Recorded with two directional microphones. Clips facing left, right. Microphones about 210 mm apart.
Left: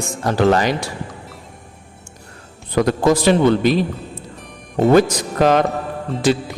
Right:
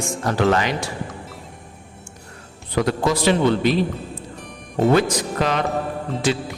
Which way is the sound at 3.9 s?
Centre (ahead or behind).